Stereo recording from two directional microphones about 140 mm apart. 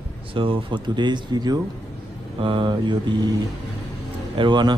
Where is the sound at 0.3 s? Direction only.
40° right (ahead or behind).